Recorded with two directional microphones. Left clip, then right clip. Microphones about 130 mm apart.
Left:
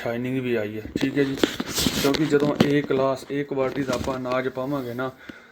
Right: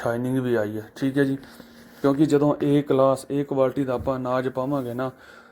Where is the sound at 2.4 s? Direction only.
35° right (ahead or behind).